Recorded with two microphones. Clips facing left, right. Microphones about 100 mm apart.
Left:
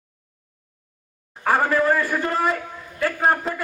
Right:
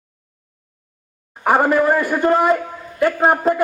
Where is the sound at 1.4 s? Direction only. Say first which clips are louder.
Right 4 dB; 20° right (ahead or behind).